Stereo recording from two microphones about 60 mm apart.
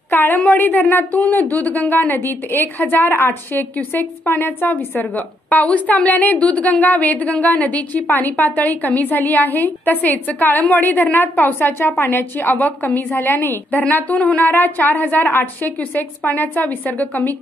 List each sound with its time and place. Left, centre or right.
0.1 s a woman's voice: left